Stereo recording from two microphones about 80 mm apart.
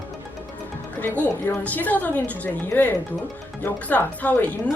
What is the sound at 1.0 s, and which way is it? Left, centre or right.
A woman's voice, centre.